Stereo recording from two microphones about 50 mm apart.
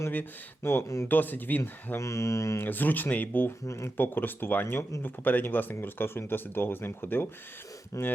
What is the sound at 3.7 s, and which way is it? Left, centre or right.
Speech, left.